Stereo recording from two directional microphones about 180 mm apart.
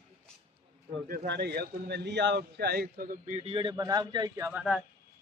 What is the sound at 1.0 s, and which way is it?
A man's voice, 60° right (ahead or behind).